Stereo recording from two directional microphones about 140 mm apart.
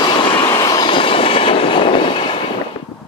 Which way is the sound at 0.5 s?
25° left (ahead or behind).